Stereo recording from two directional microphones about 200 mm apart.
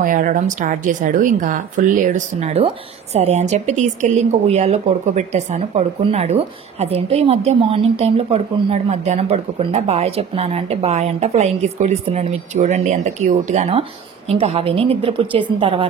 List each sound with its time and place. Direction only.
0.0 s a woman's voice: 40° right (ahead or behind)